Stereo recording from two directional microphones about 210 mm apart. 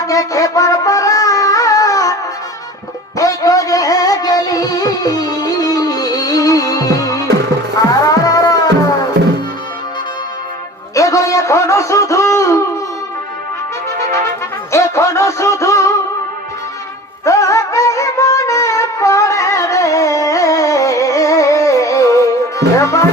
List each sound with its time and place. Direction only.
0.1 s music: 15° left (ahead or behind)
3.2 s music: 15° left (ahead or behind)
8.0 s cat: 15° left (ahead or behind)
10.9 s a sound: 15° left (ahead or behind)
14.7 s music: 15° left (ahead or behind)
17.2 s music: 15° left (ahead or behind)